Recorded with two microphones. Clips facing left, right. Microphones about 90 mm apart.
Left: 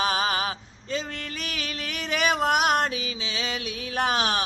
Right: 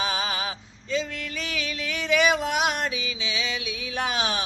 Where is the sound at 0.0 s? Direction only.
45° left (ahead or behind).